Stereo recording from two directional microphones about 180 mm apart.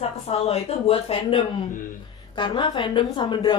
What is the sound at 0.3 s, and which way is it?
A woman's voice, 35° left (ahead or behind).